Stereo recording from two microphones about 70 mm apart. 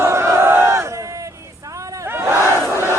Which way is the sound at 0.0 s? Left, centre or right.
Right.